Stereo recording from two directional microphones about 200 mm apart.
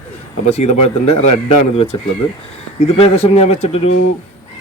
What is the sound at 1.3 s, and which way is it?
Speech, 30° left (ahead or behind).